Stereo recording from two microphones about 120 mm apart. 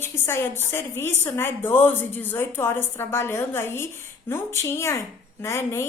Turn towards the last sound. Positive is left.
turn(degrees=25)  # may be behind; listen again after turning